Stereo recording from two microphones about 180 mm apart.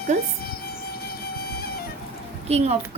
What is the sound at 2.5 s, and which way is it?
Speech, 35° right (ahead or behind).